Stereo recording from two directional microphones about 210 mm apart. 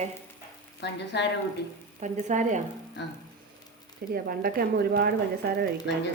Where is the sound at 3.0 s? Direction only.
55° left (ahead or behind).